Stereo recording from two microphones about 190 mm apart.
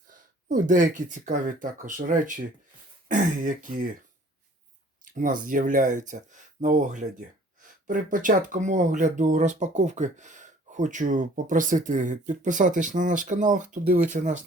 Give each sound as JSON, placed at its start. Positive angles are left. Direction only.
{"t": 0.1, "sound": "speech", "side_deg": -45}
{"t": 5.0, "sound": "a sound", "side_deg": -45}
{"t": 5.5, "sound": "speech", "side_deg": -45}